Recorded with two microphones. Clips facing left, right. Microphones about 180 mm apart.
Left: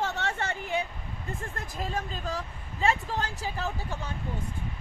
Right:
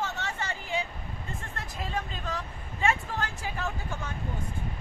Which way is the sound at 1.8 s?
40° left (ahead or behind).